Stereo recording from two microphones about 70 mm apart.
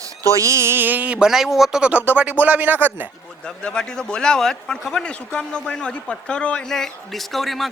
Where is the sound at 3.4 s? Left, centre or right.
Centre.